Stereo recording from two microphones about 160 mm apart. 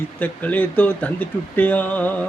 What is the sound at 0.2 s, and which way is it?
Speech, 10° left (ahead or behind).